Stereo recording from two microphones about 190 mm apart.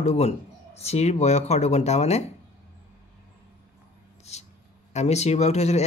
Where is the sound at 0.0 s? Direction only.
35° left (ahead or behind).